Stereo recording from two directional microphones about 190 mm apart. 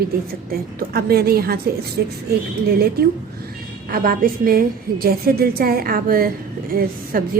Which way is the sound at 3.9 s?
50° right (ahead or behind).